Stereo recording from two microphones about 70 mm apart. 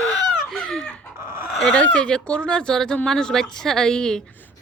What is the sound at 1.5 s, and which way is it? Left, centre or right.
Speech, centre.